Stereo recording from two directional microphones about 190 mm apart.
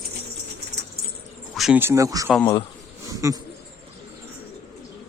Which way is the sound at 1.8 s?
15° right (ahead or behind).